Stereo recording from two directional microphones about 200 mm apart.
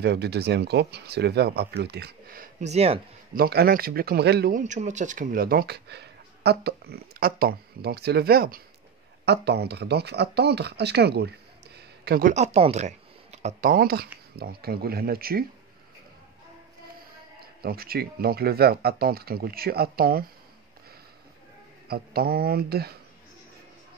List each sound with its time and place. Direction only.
0.0 s speech: 55° right (ahead or behind); by 3.0 s 30° right (ahead or behind)
3.3 s speech: 50° right (ahead or behind)
17.6 s speech: 50° right (ahead or behind)
21.8 s speech: 50° right (ahead or behind)